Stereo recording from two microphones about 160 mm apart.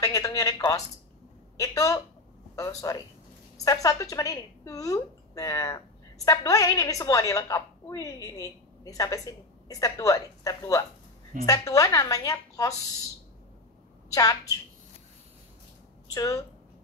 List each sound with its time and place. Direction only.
0.0 s a woman's voice: 20° left (ahead or behind)
14.1 s a woman's voice: 20° left (ahead or behind)
16.1 s a woman's voice: 20° left (ahead or behind)